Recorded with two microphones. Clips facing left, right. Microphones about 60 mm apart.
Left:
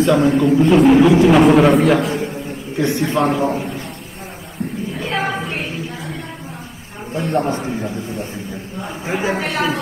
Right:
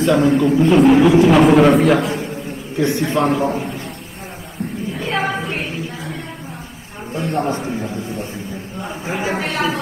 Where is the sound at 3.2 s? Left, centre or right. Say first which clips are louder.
Even; left.